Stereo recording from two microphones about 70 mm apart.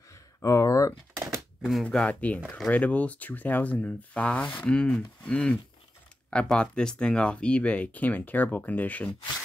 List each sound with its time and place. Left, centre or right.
0.4 s speech: left
1.6 s speech: centre
1.9 s speech: centre